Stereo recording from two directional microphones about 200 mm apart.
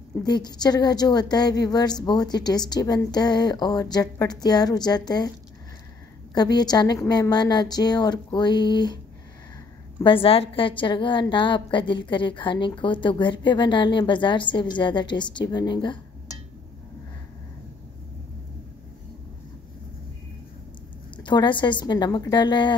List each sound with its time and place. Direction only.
0.2 s a woman's voice: 20° left (ahead or behind)
6.3 s a woman's voice: 20° left (ahead or behind)
10.0 s a woman's voice: 25° left (ahead or behind)
21.2 s a woman's voice: 25° left (ahead or behind)